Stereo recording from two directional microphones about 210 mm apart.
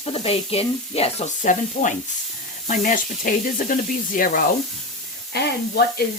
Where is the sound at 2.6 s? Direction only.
35° left (ahead or behind).